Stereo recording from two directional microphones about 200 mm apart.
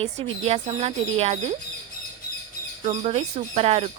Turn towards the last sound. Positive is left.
turn(degrees=-30)  # may be behind; listen again after turning